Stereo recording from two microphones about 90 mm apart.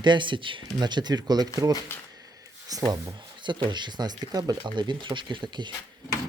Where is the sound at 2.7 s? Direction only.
45° right (ahead or behind).